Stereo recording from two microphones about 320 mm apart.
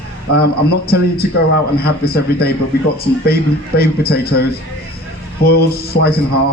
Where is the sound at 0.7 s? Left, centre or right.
Left.